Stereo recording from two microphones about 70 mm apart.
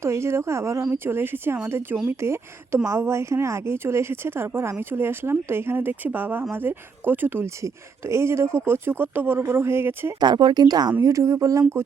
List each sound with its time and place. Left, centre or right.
0.0 s speech: right
0.9 s speech: right
7.6 s speech: right
10.2 s speech: right
11.0 s speech: right